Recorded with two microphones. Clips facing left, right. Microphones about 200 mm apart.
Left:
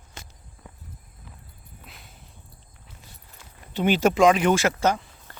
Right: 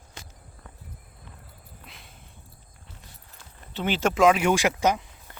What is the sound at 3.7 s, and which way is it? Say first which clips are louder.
Speech: left 5 dB; 15° left (ahead or behind).